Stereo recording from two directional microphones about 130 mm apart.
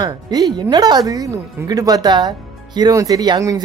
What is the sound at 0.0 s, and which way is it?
Speech, 30° right (ahead or behind).